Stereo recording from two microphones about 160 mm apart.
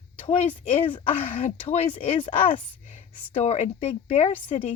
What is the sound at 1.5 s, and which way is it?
Speech, 40° left (ahead or behind).